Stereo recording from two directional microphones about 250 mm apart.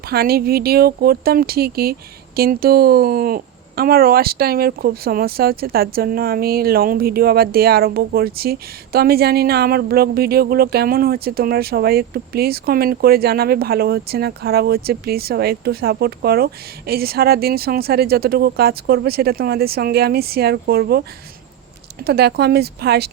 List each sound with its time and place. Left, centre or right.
0.1 s speech: right
22.0 s speech: right